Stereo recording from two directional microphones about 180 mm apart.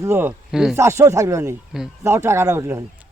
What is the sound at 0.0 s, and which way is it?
Speech, 15° right (ahead or behind).